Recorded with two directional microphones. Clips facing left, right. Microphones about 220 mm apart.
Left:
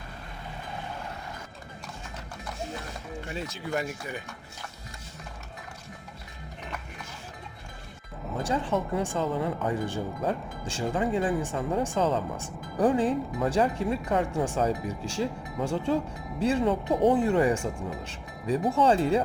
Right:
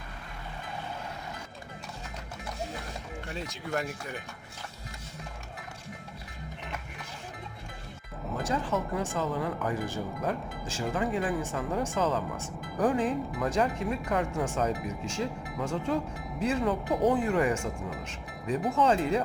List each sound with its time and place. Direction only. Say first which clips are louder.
3.2 s speech: left 3 dB; 5° left (ahead or behind)
8.4 s speech: left 3 dB; 30° left (ahead or behind)